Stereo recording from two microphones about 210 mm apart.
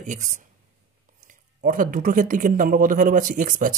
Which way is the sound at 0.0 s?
35° right (ahead or behind).